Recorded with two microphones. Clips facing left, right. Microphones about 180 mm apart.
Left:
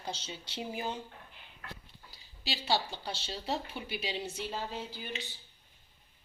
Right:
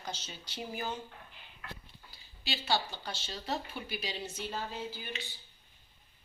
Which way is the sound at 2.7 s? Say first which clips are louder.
Left 1 dB; 30° left (ahead or behind).